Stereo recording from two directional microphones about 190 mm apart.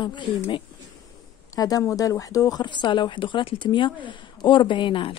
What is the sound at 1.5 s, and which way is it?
Speech, 20° left (ahead or behind).